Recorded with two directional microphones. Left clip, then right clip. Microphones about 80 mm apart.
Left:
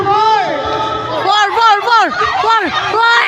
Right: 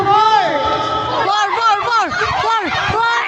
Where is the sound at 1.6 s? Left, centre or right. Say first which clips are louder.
Left 5 dB; left.